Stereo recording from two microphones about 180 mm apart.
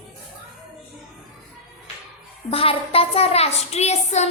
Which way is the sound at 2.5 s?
30° left (ahead or behind).